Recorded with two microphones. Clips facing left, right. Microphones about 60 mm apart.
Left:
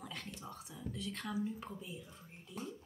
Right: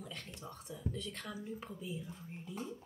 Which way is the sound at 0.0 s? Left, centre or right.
Centre.